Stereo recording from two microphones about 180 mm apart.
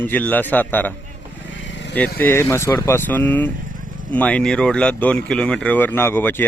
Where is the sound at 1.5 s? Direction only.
90° left.